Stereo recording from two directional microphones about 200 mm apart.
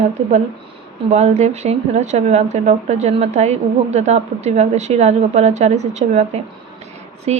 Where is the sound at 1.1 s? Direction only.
35° right (ahead or behind).